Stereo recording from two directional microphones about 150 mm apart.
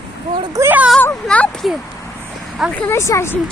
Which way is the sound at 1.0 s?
10° left (ahead or behind).